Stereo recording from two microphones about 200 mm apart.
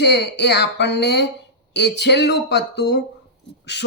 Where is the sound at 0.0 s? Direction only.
55° left (ahead or behind).